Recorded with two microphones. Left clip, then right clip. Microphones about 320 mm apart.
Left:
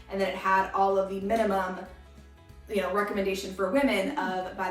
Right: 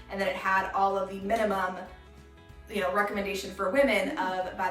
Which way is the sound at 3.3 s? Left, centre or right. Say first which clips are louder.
Even; centre.